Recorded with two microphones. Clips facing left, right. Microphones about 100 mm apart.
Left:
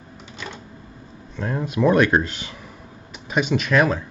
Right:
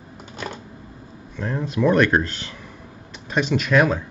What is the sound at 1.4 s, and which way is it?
Speech, 10° left (ahead or behind).